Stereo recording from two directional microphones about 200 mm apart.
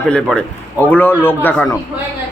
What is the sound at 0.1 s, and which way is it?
A man's voice, 5° left (ahead or behind).